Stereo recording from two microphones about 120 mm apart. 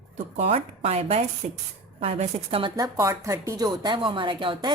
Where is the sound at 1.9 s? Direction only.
55° right (ahead or behind).